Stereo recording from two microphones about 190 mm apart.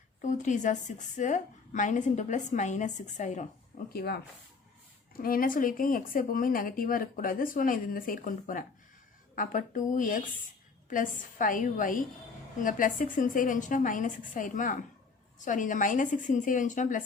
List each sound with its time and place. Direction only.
0.2 s a woman's voice: 40° left (ahead or behind)
3.9 s speech: 55° left (ahead or behind)